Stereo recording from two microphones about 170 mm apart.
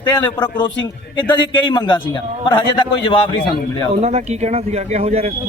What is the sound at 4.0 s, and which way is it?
Speech, 40° right (ahead or behind).